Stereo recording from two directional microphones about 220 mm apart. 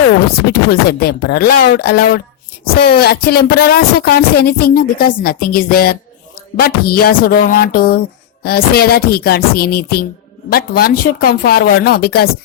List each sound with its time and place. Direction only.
0.7 s speech: 45° left (ahead or behind)